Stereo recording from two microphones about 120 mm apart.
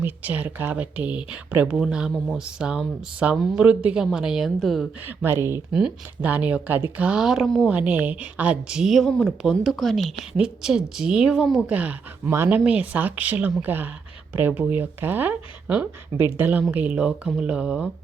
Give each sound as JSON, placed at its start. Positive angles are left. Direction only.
{"t": 0.0, "sound": "speech", "side_deg": -15}
{"t": 3.6, "sound": "speech", "side_deg": -10}
{"t": 5.0, "sound": "speech", "side_deg": -20}
{"t": 5.7, "sound": "speech", "side_deg": -10}
{"t": 7.7, "sound": "speech", "side_deg": -15}